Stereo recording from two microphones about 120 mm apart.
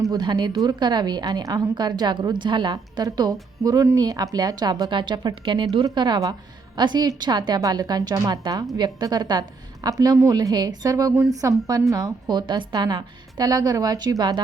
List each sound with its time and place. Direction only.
0.0 s a woman's voice: 35° right (ahead or behind)